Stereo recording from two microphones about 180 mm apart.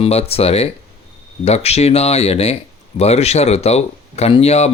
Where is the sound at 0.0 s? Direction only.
35° left (ahead or behind).